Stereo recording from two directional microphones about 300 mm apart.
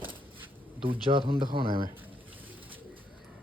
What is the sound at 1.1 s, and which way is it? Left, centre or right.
Speech, centre.